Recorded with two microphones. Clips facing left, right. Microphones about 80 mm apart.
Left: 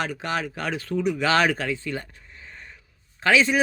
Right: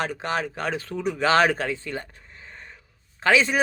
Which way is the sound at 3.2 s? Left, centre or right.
Right.